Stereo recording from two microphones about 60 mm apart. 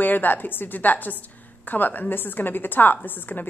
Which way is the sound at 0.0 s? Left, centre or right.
Left.